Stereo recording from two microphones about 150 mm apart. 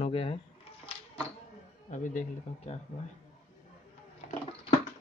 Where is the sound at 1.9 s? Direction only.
55° left (ahead or behind).